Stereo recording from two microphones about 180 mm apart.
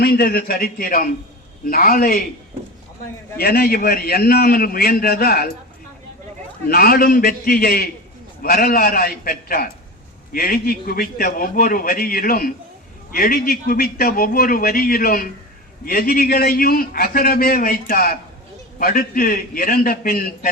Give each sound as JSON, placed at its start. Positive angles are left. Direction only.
{"t": 0.0, "sound": "a man's voice", "side_deg": 60}
{"t": 3.3, "sound": "a man's voice", "side_deg": 60}
{"t": 6.7, "sound": "a man's voice", "side_deg": 55}